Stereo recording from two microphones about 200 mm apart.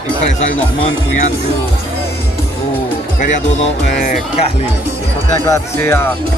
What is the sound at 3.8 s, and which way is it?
Speech, 35° left (ahead or behind).